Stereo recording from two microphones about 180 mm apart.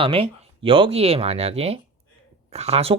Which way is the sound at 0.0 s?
30° right (ahead or behind).